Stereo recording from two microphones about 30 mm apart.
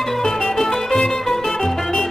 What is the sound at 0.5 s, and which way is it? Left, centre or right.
Music, centre.